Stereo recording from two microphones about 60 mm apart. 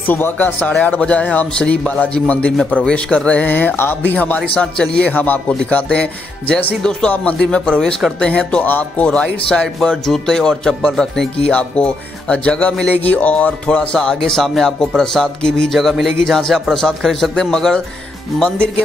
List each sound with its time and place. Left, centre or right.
0.0 s speech: left
1.5 s speech: centre
3.4 s speech: left
4.6 s speech: centre
5.1 s speech: left
5.5 s speech: centre
8.6 s speech: left
9.0 s speech: centre